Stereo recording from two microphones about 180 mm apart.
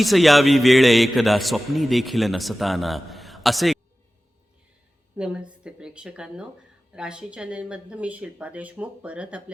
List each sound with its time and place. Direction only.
0.0 s a man's voice: centre (ahead or behind)
5.1 s a man's voice: 5° right (ahead or behind)